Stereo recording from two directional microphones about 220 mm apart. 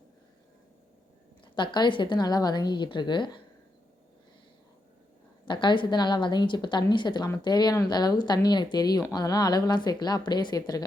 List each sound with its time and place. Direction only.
1.5 s a woman's voice: 20° left (ahead or behind)
5.5 s a woman's voice: 20° left (ahead or behind)